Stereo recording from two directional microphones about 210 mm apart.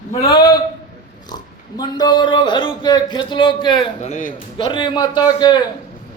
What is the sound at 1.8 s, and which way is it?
A man's voice, 20° left (ahead or behind).